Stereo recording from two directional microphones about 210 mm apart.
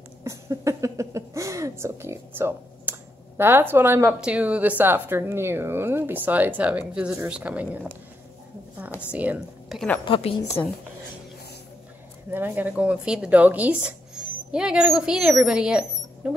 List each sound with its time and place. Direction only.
0.2 s speech: 15° right (ahead or behind)
9.1 s a woman's voice: 5° right (ahead or behind)
10.0 s a woman's voice: 25° left (ahead or behind)
12.3 s speech: 10° right (ahead or behind)